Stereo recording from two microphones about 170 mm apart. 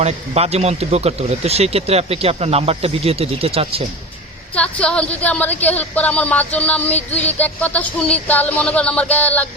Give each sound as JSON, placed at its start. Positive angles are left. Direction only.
{"t": 0.0, "sound": "a man's voice", "side_deg": -40}
{"t": 4.5, "sound": "a woman's voice", "side_deg": 5}